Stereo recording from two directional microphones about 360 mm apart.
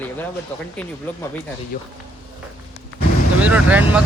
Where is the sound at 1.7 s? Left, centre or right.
Left.